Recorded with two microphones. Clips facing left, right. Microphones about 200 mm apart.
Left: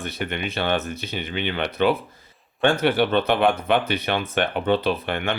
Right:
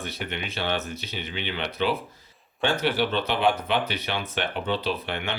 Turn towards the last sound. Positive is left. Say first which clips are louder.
# left 5 dB
turn(degrees=55)  # may be behind; listen again after turning